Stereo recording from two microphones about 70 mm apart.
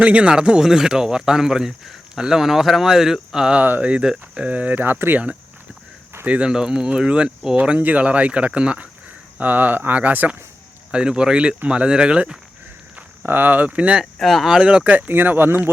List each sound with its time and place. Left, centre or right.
0.0 s speech: centre
3.6 s speech: right
13.0 s speech: right
14.0 s speech: centre
14.6 s speech: centre
14.9 s speech: right